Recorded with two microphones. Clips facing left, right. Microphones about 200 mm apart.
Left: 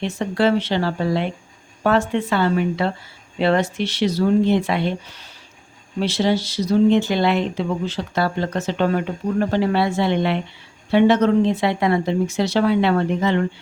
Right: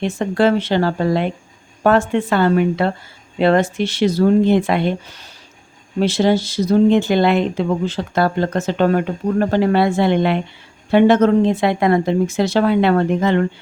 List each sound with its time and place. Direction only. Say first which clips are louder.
0.0 s speech: right 3 dB; 50° right (ahead or behind)
6.0 s speech: right 4 dB; 50° right (ahead or behind)